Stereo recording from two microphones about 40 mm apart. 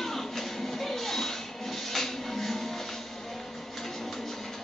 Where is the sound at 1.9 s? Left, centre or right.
Centre.